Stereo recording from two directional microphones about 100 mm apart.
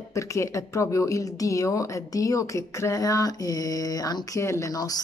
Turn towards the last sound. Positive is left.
turn(degrees=40)  # may be behind; listen again after turning